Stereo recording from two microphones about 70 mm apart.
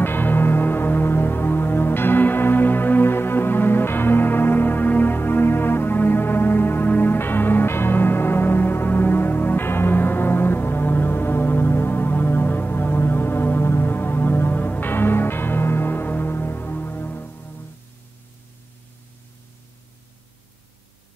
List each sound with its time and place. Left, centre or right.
0.0 s music: left